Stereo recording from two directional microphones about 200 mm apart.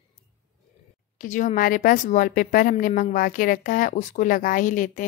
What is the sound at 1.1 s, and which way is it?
Speech, 40° left (ahead or behind).